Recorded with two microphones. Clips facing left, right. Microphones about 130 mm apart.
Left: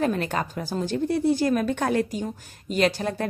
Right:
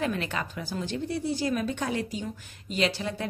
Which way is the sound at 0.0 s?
40° left (ahead or behind).